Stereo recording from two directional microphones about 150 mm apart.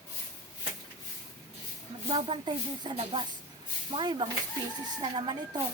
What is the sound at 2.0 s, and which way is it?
Speech, 35° right (ahead or behind).